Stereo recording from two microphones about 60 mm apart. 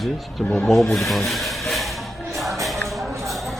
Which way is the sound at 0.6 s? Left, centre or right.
Centre.